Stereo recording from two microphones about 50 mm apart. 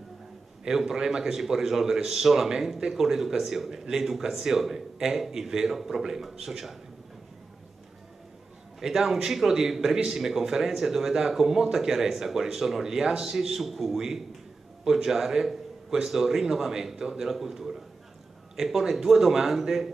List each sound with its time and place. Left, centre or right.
0.7 s a man's voice: centre
8.7 s a man's voice: centre